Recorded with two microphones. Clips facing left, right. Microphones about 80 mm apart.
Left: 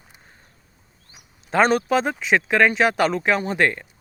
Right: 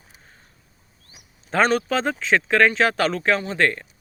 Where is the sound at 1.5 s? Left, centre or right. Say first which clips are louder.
Left 2 dB; centre.